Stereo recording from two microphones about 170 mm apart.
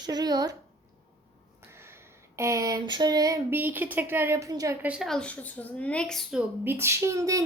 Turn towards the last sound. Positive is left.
turn(degrees=-20)  # may be behind; listen again after turning